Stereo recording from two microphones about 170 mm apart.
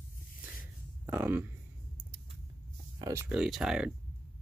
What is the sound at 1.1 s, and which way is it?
Speech, 10° right (ahead or behind).